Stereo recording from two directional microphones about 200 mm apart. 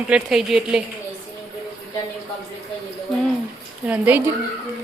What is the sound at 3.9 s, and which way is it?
Speech, 10° right (ahead or behind).